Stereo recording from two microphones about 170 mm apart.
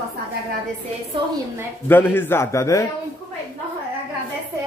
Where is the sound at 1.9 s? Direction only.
10° left (ahead or behind).